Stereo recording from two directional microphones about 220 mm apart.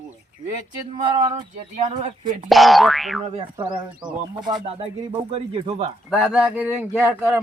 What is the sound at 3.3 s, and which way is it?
Speech, 20° right (ahead or behind).